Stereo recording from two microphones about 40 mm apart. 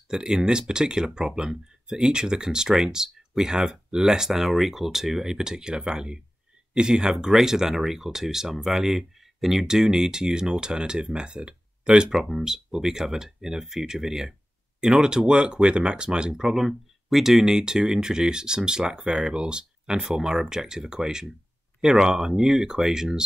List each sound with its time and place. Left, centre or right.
0.1 s speech: centre